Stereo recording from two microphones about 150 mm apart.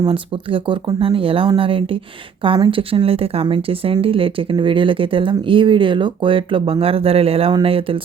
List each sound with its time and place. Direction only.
0.1 s a woman's voice: 35° right (ahead or behind)